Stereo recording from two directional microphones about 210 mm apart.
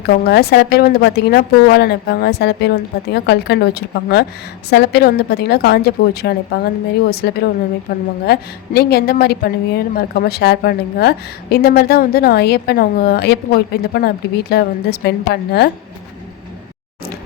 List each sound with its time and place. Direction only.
0.1 s a woman's voice: 50° left (ahead or behind)